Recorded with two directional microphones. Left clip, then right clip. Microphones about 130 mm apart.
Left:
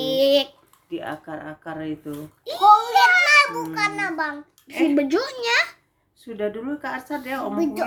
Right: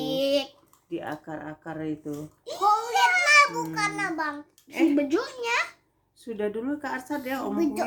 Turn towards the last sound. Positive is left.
turn(degrees=-15)  # may be behind; listen again after turning